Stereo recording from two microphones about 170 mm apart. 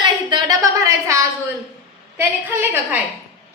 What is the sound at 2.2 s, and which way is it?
Speech, 15° right (ahead or behind).